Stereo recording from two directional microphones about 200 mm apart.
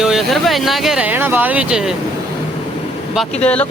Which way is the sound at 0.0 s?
Centre (ahead or behind).